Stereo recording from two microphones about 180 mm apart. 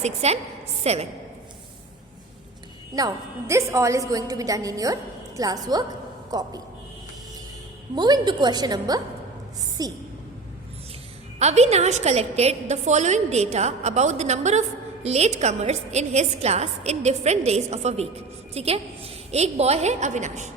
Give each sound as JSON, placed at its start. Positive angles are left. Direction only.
{"t": 0.0, "sound": "a woman's voice", "side_deg": -35}
{"t": 2.9, "sound": "a woman's voice", "side_deg": -20}
{"t": 7.9, "sound": "a woman's voice", "side_deg": -25}
{"t": 11.3, "sound": "a woman's voice", "side_deg": -40}